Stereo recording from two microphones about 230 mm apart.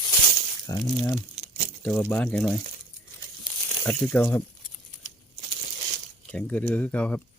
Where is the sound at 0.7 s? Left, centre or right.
Centre.